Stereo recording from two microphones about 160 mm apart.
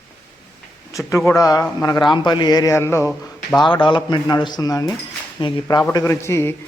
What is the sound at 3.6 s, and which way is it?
Speech, 30° left (ahead or behind).